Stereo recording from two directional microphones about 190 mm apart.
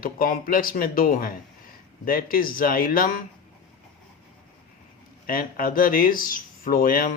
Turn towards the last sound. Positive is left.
turn(degrees=50)  # may be behind; listen again after turning